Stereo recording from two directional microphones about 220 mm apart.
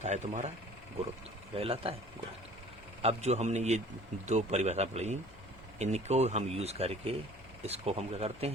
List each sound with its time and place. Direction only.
0.0 s speech: 30° right (ahead or behind)
1.5 s speech: 25° right (ahead or behind)
3.0 s speech: 30° right (ahead or behind)